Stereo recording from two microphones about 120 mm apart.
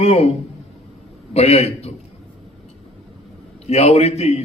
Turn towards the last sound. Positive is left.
turn(degrees=60)  # may be behind; listen again after turning